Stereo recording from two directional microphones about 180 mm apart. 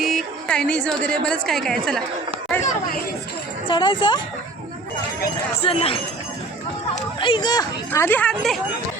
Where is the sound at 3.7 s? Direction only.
25° left (ahead or behind).